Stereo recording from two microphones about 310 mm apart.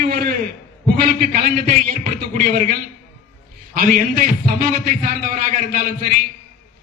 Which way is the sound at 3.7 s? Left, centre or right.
Right.